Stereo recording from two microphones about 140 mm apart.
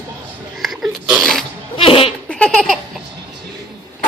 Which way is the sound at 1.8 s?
40° left (ahead or behind).